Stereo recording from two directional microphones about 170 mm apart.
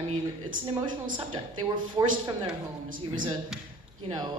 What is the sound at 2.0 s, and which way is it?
Speech, 25° right (ahead or behind).